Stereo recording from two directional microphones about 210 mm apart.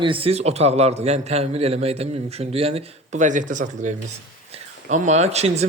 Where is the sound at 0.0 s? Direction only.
25° right (ahead or behind).